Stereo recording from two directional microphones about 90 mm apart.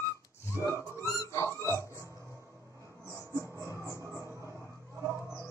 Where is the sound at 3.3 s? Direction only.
30° right (ahead or behind).